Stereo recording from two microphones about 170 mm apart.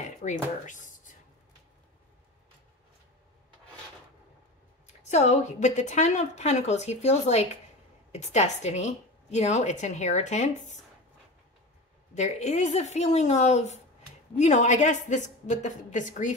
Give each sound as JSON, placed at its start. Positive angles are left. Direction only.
{"t": 0.0, "sound": "a sound", "side_deg": 45}
{"t": 5.0, "sound": "a woman's voice", "side_deg": 40}
{"t": 12.1, "sound": "a woman's voice", "side_deg": 40}